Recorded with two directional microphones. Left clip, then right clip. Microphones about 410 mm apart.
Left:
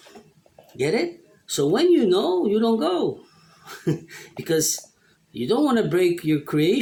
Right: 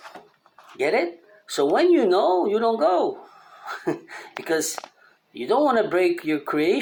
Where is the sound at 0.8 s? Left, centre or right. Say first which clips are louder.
Right 1 dB; left.